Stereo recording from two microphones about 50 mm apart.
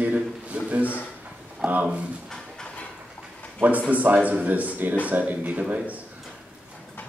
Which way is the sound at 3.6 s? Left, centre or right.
Right.